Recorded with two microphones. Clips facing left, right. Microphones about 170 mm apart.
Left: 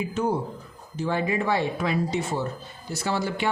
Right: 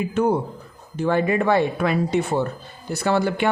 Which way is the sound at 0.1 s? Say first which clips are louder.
Right 5 dB; 60° right (ahead or behind).